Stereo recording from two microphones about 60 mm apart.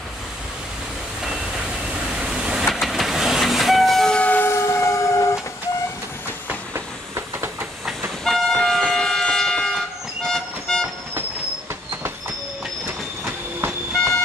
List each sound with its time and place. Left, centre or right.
1.2 s vehicle: centre
2.7 s train: centre
4.1 s train: left
4.4 s train: left
6.7 s train: right
8.2 s train: centre
10.2 s vehicle: centre